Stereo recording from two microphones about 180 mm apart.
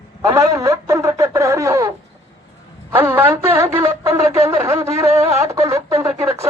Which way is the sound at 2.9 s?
10° right (ahead or behind).